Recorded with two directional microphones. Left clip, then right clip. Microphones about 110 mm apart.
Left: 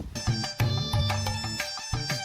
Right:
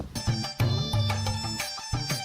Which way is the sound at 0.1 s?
Centre (ahead or behind).